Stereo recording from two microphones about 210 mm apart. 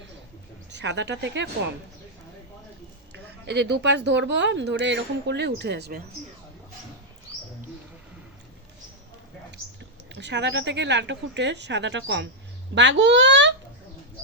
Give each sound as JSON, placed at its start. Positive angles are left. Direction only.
{"t": 0.7, "sound": "speech", "side_deg": -55}
{"t": 3.1, "sound": "speech", "side_deg": -55}
{"t": 10.2, "sound": "speech", "side_deg": -55}